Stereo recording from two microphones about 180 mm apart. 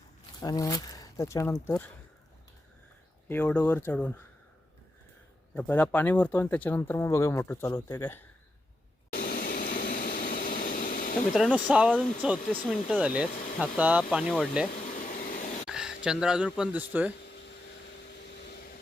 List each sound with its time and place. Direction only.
0.3 s speech: 20° left (ahead or behind)
3.2 s speech: 10° left (ahead or behind)
5.5 s speech: 10° left (ahead or behind)
9.1 s a sound: 55° left (ahead or behind)
11.3 s speech: 5° right (ahead or behind)
14.7 s air conditioning: 45° left (ahead or behind)
15.6 s speech: 5° right (ahead or behind)